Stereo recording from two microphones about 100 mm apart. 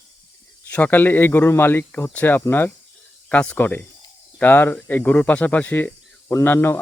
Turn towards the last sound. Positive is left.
turn(degrees=20)  # may be behind; listen again after turning